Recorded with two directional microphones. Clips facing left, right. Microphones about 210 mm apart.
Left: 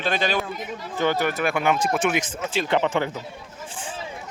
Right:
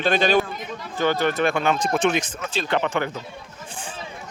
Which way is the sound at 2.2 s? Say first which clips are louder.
Left 2 dB; 20° left (ahead or behind).